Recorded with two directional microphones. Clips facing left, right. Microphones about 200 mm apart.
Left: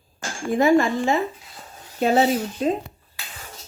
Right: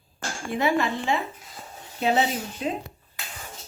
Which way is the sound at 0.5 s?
45° left (ahead or behind).